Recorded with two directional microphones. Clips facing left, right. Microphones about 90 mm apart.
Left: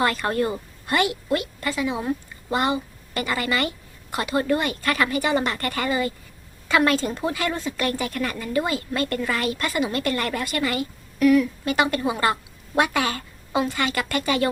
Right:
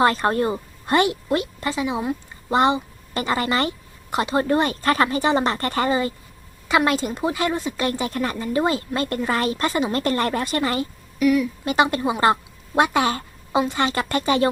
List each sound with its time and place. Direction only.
0.0 s speech: 30° right (ahead or behind)
11.2 s speech: 5° right (ahead or behind)
11.6 s a woman's voice: 25° right (ahead or behind)